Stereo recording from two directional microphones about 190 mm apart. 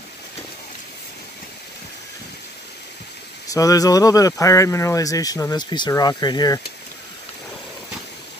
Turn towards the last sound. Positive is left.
turn(degrees=20)  # may be behind; listen again after turning